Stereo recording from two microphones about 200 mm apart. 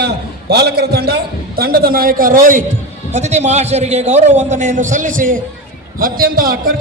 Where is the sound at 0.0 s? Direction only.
55° right (ahead or behind).